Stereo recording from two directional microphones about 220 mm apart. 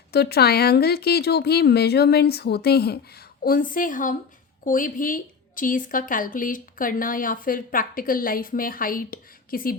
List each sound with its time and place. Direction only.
0.1 s a woman's voice: 45° left (ahead or behind)